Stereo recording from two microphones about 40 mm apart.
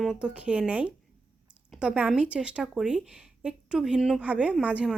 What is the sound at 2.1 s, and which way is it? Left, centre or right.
Speech, right.